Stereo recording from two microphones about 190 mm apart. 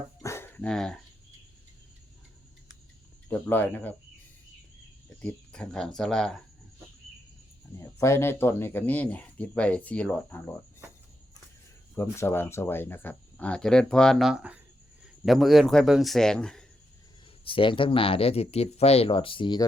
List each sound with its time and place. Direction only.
0.2 s dog: 15° left (ahead or behind)
3.2 s speech: 10° left (ahead or behind)
5.0 s speech: 5° left (ahead or behind)
7.8 s speech: 15° left (ahead or behind)
11.9 s speech: 15° left (ahead or behind)
17.4 s speech: 25° left (ahead or behind)